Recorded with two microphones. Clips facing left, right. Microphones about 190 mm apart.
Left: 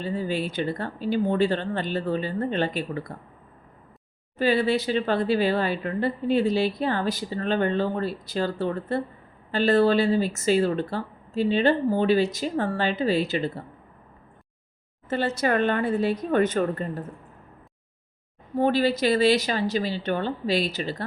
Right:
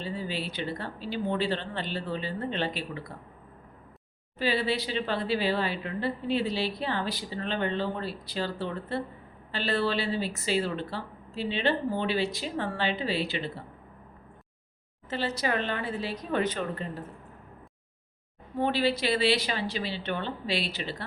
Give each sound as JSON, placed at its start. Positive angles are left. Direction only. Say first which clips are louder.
{"t": 0.0, "sound": "speech", "louder": "left 6 dB", "side_deg": 50}
{"t": 4.4, "sound": "speech", "louder": "left 6 dB", "side_deg": 45}
{"t": 15.1, "sound": "speech", "louder": "left 6 dB", "side_deg": 50}
{"t": 18.5, "sound": "speech", "louder": "left 5 dB", "side_deg": 45}